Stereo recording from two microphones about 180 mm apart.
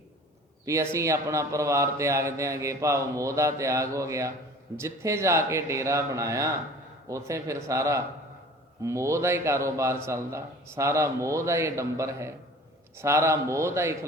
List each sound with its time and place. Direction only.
0.6 s a man's voice: 15° right (ahead or behind)